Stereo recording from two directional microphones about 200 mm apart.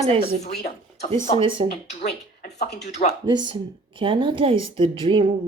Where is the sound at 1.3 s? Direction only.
25° right (ahead or behind).